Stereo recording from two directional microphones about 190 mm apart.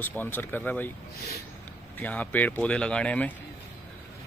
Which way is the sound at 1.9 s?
10° left (ahead or behind).